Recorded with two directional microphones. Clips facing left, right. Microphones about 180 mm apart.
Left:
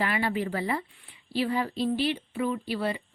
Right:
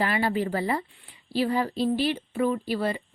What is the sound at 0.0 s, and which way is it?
A woman's voice, 35° right (ahead or behind).